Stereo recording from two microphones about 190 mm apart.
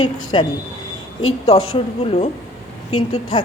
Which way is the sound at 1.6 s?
30° left (ahead or behind).